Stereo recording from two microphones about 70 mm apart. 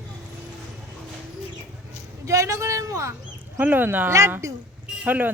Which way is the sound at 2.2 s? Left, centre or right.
Right.